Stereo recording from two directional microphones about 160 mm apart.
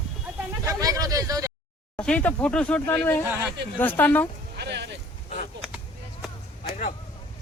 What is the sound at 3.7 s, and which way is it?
Speech, 10° left (ahead or behind).